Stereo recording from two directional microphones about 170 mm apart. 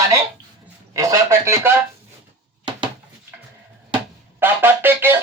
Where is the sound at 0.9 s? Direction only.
20° right (ahead or behind).